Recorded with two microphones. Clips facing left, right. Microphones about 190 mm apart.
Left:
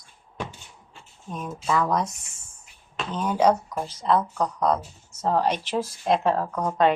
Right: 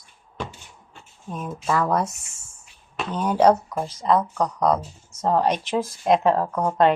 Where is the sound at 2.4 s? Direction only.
10° right (ahead or behind).